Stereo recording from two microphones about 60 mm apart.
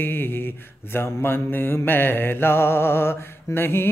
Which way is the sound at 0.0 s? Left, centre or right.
Left.